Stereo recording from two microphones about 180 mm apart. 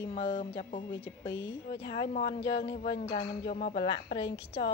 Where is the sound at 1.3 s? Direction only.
80° left.